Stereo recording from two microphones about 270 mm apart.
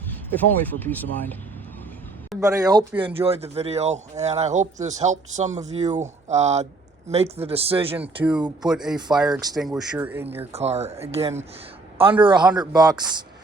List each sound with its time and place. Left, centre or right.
0.0 s speech: centre
2.4 s speech: centre
8.0 s speech: centre
10.5 s speech: right